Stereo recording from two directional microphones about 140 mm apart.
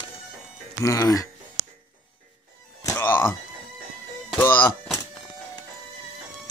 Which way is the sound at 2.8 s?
15° left (ahead or behind).